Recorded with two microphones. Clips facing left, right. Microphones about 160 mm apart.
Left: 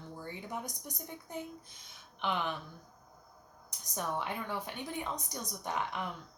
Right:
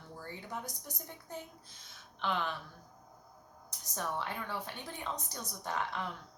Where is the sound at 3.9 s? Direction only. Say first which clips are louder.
Left 2 dB; 15° left (ahead or behind).